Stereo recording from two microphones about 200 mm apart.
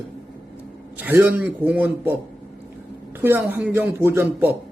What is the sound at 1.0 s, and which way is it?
A man's voice, 10° right (ahead or behind).